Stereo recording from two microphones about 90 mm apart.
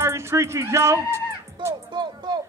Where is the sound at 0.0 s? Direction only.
30° right (ahead or behind).